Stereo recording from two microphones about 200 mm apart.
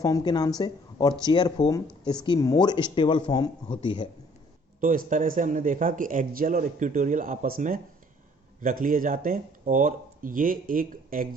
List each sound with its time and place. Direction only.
0.0 s speech: 20° left (ahead or behind)
4.8 s speech: 45° right (ahead or behind)